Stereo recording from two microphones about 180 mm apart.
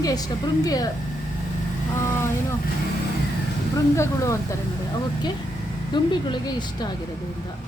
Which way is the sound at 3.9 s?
15° left (ahead or behind).